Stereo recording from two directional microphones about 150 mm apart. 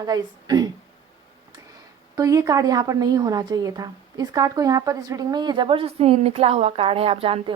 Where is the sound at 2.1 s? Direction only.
20° right (ahead or behind); by 7.5 s 40° right (ahead or behind).